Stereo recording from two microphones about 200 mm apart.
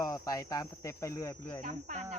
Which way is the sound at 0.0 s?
15° left (ahead or behind).